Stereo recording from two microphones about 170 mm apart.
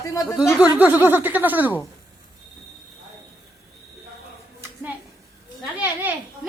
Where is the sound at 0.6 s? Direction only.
10° right (ahead or behind).